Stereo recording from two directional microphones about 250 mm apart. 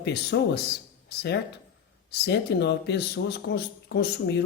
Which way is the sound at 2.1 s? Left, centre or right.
Left.